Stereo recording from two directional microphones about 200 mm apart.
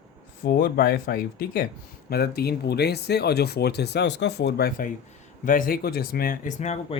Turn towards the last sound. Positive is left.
turn(degrees=35)  # may be behind; listen again after turning